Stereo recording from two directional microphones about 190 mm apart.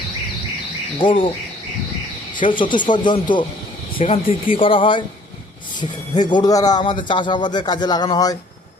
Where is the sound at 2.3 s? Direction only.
25° left (ahead or behind).